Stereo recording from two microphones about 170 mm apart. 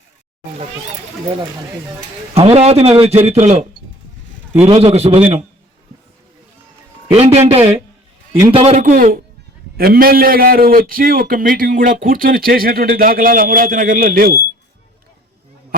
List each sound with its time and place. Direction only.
2.3 s a man's voice: 35° right (ahead or behind)
7.1 s a man's voice: 35° right (ahead or behind)
8.8 s a man's voice: 50° right (ahead or behind)